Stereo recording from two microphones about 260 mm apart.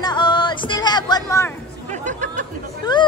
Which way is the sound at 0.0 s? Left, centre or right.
Centre.